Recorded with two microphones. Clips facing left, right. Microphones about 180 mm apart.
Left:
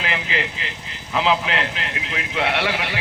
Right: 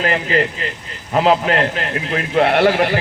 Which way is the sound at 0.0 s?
45° right (ahead or behind).